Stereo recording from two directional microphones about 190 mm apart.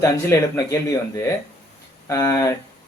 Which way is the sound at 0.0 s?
15° left (ahead or behind).